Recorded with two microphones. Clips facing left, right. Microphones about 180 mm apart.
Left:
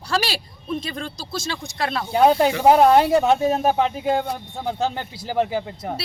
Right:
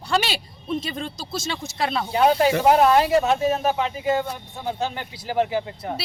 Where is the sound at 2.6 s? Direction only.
25° left (ahead or behind).